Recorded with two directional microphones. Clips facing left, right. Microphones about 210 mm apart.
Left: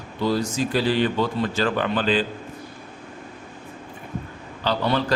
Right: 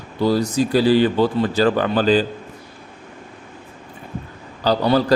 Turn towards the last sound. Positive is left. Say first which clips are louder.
# right 6 dB
turn(degrees=-35)  # may be behind; listen again after turning